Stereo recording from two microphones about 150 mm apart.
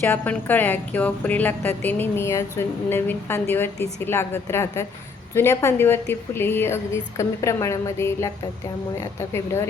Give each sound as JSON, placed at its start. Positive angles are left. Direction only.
{"t": 0.0, "sound": "a woman's voice", "side_deg": 10}